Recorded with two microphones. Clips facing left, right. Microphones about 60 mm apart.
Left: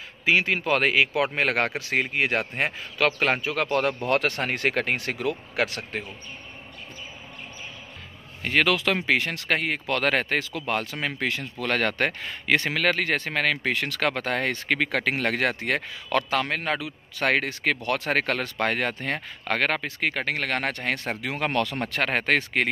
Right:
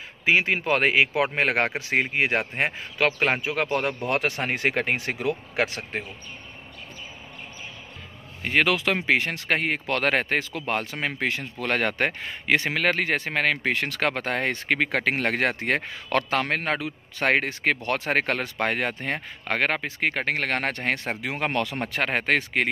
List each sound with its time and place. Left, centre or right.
0.2 s speech: right
8.4 s speech: centre